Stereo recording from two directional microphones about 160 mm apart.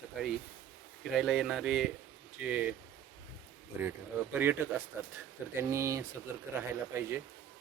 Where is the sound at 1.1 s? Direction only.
Centre (ahead or behind).